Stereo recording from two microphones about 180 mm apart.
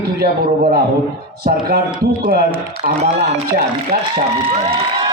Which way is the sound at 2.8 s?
50° right (ahead or behind).